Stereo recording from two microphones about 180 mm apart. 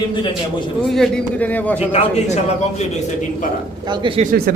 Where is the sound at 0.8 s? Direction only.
Centre (ahead or behind).